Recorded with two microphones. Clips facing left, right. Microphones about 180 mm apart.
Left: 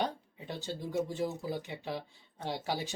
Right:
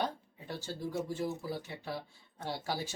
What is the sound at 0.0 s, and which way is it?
Speech, 20° left (ahead or behind).